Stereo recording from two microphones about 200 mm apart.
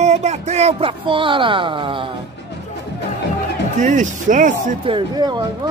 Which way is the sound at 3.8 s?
40° right (ahead or behind).